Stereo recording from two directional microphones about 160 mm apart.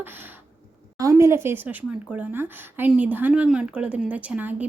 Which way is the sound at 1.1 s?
15° right (ahead or behind).